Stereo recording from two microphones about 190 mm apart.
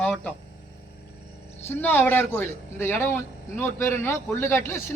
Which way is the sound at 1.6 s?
10° left (ahead or behind).